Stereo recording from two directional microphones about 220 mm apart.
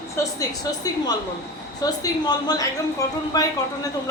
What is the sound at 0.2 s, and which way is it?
Speech, 10° left (ahead or behind).